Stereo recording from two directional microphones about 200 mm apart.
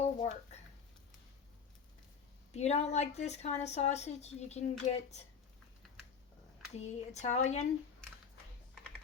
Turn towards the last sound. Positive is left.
turn(degrees=35)  # may be behind; listen again after turning